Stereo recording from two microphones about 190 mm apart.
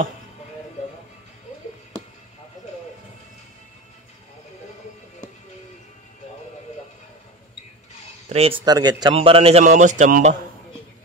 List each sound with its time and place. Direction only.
8.3 s a man's voice: 30° right (ahead or behind)